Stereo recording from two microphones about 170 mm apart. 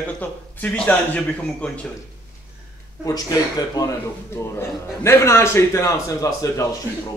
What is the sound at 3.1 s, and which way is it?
A man's voice, 20° left (ahead or behind).